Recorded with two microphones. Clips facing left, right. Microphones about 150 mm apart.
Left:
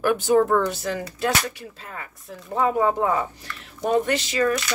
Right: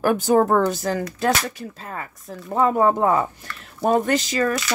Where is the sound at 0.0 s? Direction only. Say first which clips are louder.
Right 1 dB; 40° right (ahead or behind).